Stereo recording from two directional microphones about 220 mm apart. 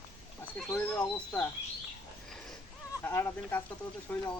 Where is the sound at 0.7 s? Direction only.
10° left (ahead or behind).